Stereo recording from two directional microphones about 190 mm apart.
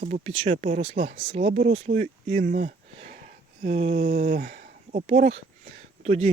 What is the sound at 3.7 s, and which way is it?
Speech, 35° right (ahead or behind).